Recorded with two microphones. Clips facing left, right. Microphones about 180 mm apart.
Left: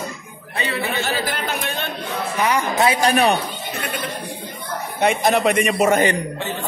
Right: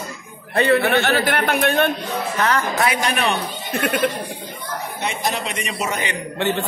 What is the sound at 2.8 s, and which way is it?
Speech, 35° left (ahead or behind).